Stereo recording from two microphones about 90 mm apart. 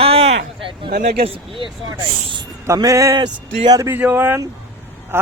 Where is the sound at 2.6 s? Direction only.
40° right (ahead or behind).